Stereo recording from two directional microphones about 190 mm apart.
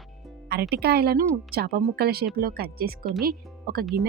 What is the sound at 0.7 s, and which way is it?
A woman's voice, 55° right (ahead or behind).